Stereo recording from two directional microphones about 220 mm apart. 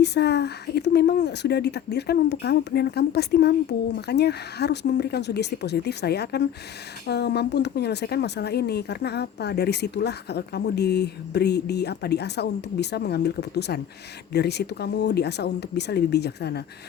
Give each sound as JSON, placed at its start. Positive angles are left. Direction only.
{"t": 0.0, "sound": "a woman's voice", "side_deg": 50}